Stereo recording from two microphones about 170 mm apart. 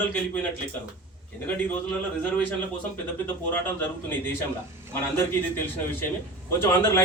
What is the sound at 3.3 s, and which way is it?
Speech, 10° left (ahead or behind).